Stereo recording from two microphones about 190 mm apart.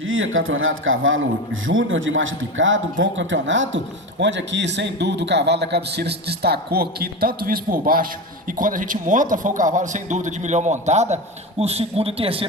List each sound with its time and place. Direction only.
0.0 s speech: 90° right
3.0 s a man's voice: 80° right; by 12.5 s 30° right (ahead or behind)